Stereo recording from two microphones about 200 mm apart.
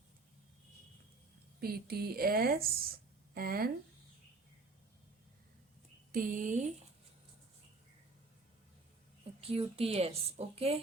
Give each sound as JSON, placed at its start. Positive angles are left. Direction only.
{"t": 1.6, "sound": "speech", "side_deg": -50}
{"t": 6.1, "sound": "speech", "side_deg": -45}
{"t": 9.4, "sound": "a woman's voice", "side_deg": -30}